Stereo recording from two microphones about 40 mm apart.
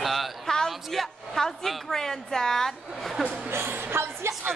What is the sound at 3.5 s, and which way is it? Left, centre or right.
Speech, right.